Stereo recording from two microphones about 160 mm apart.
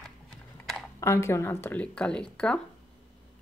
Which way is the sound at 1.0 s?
15° left (ahead or behind).